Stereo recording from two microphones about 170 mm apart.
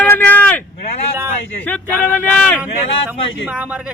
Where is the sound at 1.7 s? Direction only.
10° left (ahead or behind).